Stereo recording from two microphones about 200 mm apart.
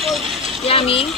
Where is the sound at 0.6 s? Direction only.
30° left (ahead or behind).